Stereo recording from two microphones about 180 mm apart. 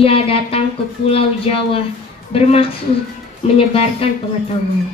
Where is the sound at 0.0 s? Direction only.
30° left (ahead or behind).